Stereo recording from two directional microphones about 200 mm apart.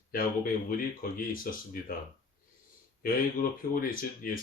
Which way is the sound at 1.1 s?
45° left (ahead or behind).